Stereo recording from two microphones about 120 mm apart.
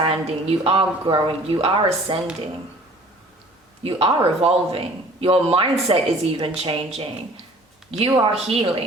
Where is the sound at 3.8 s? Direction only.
55° right (ahead or behind).